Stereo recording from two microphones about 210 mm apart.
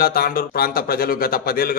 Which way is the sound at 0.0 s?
45° left (ahead or behind).